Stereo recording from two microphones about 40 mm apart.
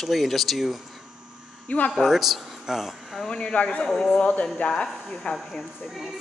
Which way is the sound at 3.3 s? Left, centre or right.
Left.